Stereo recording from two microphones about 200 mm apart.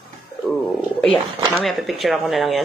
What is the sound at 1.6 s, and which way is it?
A woman's voice, centre (ahead or behind).